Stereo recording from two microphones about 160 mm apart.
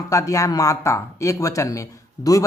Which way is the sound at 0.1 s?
20° left (ahead or behind).